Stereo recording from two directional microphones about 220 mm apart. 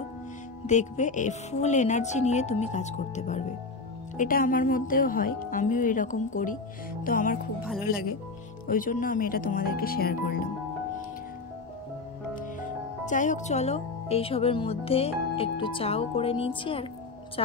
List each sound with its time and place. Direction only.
0.7 s a woman's voice: 35° left (ahead or behind)
12.4 s speech: 35° left (ahead or behind)